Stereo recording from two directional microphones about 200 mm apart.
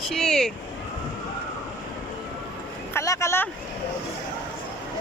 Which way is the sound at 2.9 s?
15° left (ahead or behind).